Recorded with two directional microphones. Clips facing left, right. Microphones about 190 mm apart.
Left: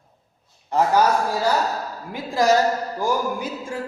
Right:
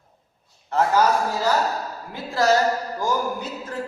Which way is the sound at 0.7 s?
15° left (ahead or behind).